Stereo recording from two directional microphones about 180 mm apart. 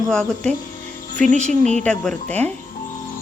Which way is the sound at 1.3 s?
40° right (ahead or behind).